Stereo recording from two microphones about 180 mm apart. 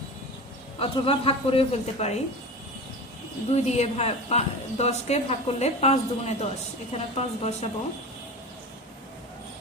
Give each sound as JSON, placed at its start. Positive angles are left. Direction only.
{"t": 0.8, "sound": "a woman's voice", "side_deg": 30}
{"t": 3.5, "sound": "a woman's voice", "side_deg": 35}